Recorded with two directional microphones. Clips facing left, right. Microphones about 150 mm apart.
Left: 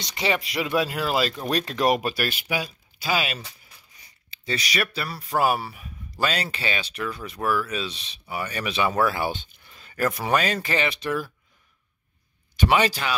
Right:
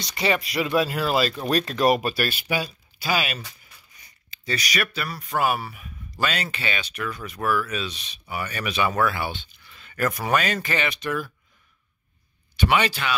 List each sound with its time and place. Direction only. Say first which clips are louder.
0.0 s speech: right 1 dB; 15° left (ahead or behind)
12.5 s speech: left 1 dB; 40° left (ahead or behind)